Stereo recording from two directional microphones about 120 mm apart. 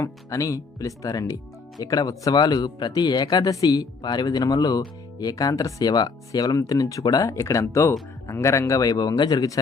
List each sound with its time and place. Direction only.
0.0 s speech: 25° left (ahead or behind)